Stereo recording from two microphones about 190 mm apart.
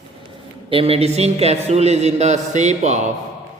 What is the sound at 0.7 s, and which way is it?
A man's voice, 30° right (ahead or behind).